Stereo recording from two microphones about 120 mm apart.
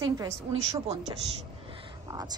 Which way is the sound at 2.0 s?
35° right (ahead or behind).